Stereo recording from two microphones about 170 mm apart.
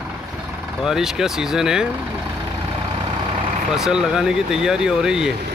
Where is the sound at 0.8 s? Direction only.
5° right (ahead or behind).